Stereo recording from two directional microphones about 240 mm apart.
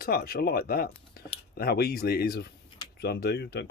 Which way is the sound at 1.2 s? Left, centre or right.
Left.